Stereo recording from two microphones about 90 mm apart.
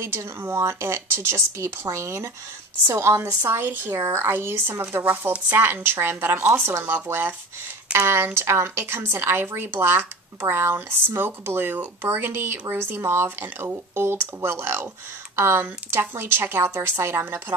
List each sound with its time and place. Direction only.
0.0 s a woman's voice: 30° right (ahead or behind)